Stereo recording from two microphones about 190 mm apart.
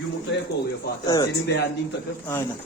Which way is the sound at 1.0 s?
20° left (ahead or behind).